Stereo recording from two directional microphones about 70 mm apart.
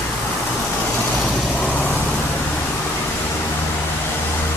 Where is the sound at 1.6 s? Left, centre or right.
Left.